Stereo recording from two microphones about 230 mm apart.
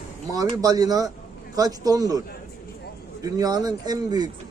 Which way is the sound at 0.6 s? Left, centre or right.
Centre.